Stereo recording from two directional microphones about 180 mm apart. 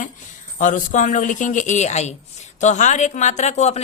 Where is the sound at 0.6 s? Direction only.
45° left (ahead or behind).